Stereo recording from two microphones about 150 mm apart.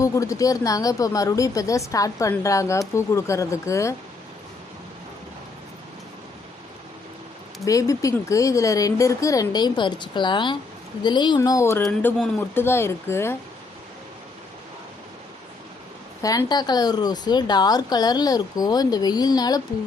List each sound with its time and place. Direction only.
0.0 s speech: 20° left (ahead or behind)
7.6 s speech: 20° left (ahead or behind)
16.2 s speech: 25° left (ahead or behind)